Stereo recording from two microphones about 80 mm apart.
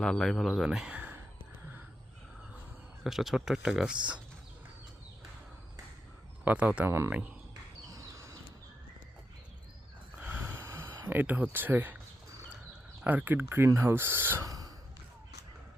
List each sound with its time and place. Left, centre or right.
0.0 s speech: centre
0.9 s speech: centre
3.0 s speech: centre
6.4 s speech: centre
6.8 s speech: right
7.1 s speech: centre
7.9 s a sound: right
10.2 s snort: right
10.7 s a sound: right
11.1 s speech: right
13.1 s speech: right
14.4 s sigh: right